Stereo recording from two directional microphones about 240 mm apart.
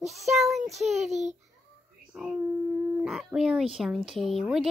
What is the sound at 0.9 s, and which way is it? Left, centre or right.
Speech, right.